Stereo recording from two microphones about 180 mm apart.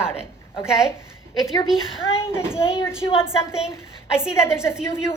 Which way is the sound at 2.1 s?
15° left (ahead or behind).